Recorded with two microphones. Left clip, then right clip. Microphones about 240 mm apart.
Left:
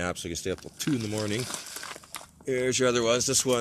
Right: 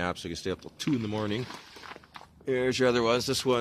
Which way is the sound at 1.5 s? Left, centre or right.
Left.